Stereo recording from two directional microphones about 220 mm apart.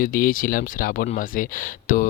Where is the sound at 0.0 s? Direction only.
40° left (ahead or behind).